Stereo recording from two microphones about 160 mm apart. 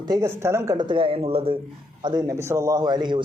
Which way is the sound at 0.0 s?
25° right (ahead or behind).